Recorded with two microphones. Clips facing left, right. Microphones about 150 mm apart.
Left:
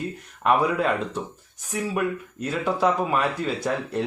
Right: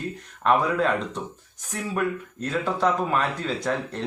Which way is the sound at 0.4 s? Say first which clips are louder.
Even; 10° left (ahead or behind).